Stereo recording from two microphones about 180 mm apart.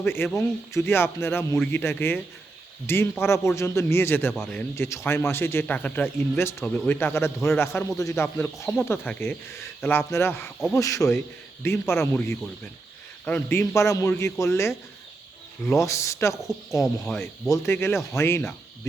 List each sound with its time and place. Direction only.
0.0 s a man's voice: 10° left (ahead or behind)
15.8 s a man's voice: 15° left (ahead or behind)